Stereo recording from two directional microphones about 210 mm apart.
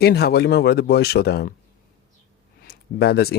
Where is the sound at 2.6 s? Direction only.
50° left (ahead or behind).